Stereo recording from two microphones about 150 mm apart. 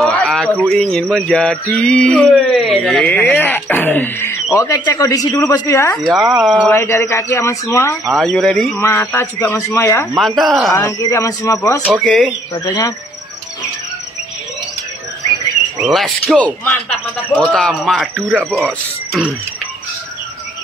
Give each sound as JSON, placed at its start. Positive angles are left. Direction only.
{"t": 0.0, "sound": "a sound", "side_deg": 0}
{"t": 0.7, "sound": "a man's voice", "side_deg": 5}
{"t": 6.0, "sound": "speech", "side_deg": 0}
{"t": 8.0, "sound": "speech", "side_deg": 0}
{"t": 8.7, "sound": "speech", "side_deg": 15}
{"t": 10.1, "sound": "speech", "side_deg": 0}
{"t": 10.8, "sound": "speech", "side_deg": 20}
{"t": 11.9, "sound": "speech", "side_deg": 5}
{"t": 12.5, "sound": "speech", "side_deg": 25}
{"t": 15.8, "sound": "speech", "side_deg": 0}